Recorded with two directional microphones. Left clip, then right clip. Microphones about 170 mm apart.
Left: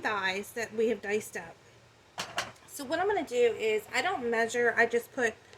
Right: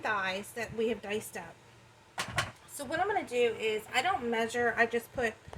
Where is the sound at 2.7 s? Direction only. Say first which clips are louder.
Left 2 dB; 40° left (ahead or behind).